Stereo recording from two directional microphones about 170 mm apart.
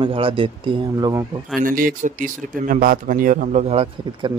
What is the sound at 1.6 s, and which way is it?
Speech, 55° right (ahead or behind).